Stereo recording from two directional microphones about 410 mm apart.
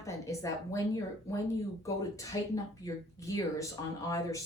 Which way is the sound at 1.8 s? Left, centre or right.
Centre.